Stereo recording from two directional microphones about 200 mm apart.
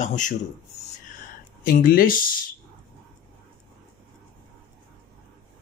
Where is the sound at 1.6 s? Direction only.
45° left (ahead or behind).